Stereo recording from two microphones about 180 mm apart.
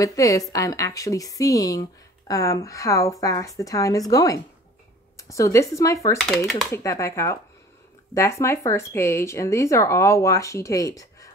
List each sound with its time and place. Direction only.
0.0 s speech: 20° left (ahead or behind)
6.1 s speech: centre (ahead or behind)
6.7 s speech: 15° left (ahead or behind)